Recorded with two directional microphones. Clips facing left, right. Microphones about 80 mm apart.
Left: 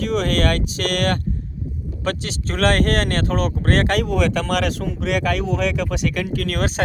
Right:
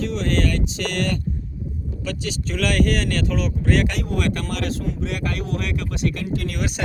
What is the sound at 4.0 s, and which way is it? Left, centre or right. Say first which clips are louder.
Speech: left 5 dB; left.